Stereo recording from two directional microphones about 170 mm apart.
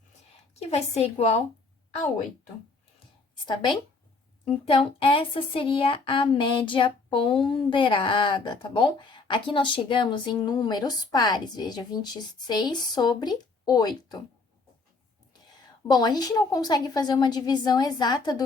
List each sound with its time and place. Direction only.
0.7 s a woman's voice: 40° left (ahead or behind)
3.4 s speech: 25° left (ahead or behind)
15.9 s speech: 25° left (ahead or behind)